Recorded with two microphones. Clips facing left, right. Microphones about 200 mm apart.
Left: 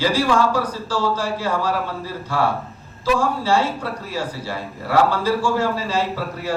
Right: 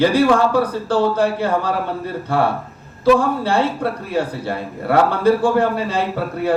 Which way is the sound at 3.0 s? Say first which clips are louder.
Right 6 dB; 60° right (ahead or behind).